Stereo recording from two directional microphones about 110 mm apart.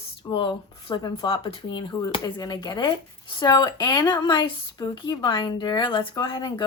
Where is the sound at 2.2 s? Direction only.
40° left (ahead or behind).